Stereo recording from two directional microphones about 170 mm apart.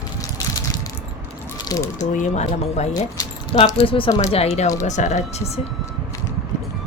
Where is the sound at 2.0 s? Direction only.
45° left (ahead or behind).